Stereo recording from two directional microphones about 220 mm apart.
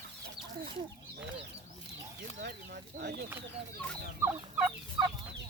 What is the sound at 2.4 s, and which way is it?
Bird, 50° right (ahead or behind).